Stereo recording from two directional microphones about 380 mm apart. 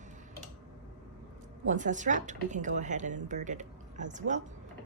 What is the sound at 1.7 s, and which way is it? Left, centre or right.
A woman's voice, centre.